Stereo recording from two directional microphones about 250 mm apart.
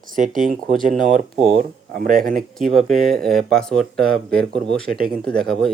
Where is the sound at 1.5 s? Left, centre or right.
Right.